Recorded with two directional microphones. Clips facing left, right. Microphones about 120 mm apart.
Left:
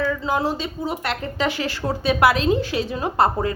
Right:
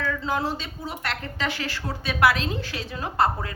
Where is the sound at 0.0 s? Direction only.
10° left (ahead or behind).